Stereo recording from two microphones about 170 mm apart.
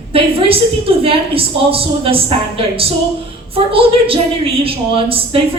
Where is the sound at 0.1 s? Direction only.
35° right (ahead or behind).